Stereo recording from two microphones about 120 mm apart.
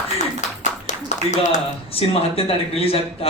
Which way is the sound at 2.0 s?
55° left (ahead or behind).